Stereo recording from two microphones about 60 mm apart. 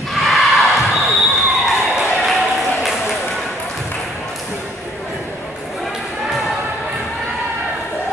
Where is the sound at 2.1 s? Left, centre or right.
Centre.